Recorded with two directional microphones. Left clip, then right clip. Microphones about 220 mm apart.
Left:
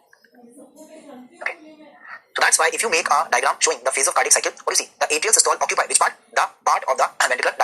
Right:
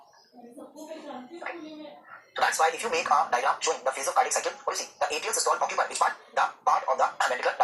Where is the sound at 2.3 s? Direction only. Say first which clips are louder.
Left 6 dB; 50° left (ahead or behind).